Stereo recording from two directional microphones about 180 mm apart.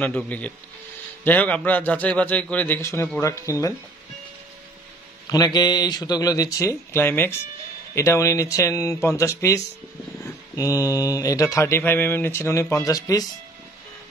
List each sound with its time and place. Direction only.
0.0 s speech: 10° left (ahead or behind)
5.3 s speech: 20° left (ahead or behind)